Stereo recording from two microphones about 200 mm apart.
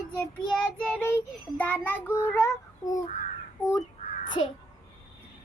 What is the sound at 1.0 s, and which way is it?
Child singing, 10° left (ahead or behind).